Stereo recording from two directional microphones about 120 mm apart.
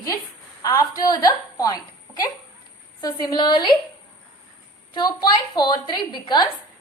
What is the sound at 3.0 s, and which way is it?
Speech, 35° left (ahead or behind).